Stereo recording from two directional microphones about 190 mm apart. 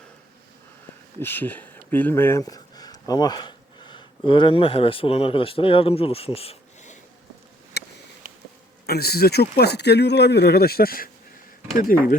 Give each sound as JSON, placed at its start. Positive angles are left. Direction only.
{"t": 1.2, "sound": "speech", "side_deg": 10}
{"t": 7.8, "sound": "a sound", "side_deg": 60}
{"t": 8.2, "sound": "bee", "side_deg": -45}
{"t": 8.9, "sound": "speech", "side_deg": 55}